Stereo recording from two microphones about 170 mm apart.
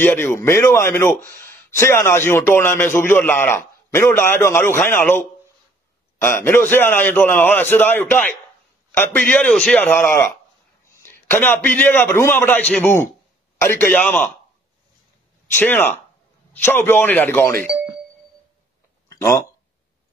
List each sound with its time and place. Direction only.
0.0 s a man's voice: 10° left (ahead or behind)
6.2 s a man's voice: 15° left (ahead or behind)
15.5 s a man's voice: 10° left (ahead or behind)
19.0 s a sound: 20° left (ahead or behind)